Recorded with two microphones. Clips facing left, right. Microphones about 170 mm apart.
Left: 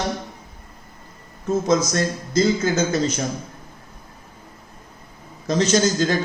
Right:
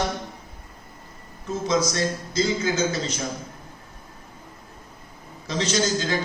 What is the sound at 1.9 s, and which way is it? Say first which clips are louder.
Speech: left 4 dB; 45° left (ahead or behind).